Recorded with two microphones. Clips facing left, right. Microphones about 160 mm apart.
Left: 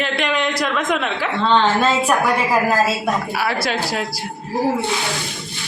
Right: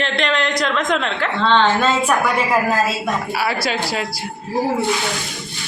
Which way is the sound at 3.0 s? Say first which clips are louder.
Even; centre (ahead or behind).